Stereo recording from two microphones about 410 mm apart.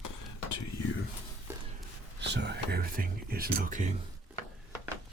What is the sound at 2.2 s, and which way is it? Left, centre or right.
Speech, right.